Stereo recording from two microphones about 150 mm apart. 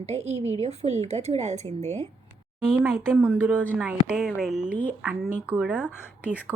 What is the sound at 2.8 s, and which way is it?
Speech, 15° right (ahead or behind).